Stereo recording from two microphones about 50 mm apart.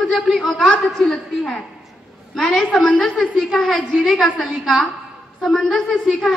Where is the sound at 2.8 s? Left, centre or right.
Left.